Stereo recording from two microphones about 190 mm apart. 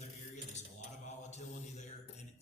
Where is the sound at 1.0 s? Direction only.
35° left (ahead or behind).